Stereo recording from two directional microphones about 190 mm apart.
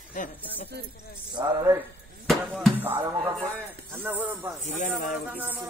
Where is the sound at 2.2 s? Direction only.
Centre (ahead or behind).